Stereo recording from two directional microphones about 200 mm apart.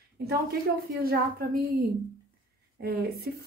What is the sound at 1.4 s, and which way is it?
A woman's voice, 50° right (ahead or behind).